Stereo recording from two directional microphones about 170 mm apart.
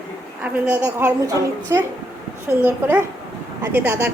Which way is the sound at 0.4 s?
10° right (ahead or behind).